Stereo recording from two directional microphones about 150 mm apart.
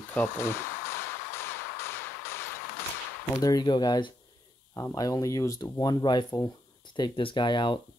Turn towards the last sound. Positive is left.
turn(degrees=30)  # may be behind; listen again after turning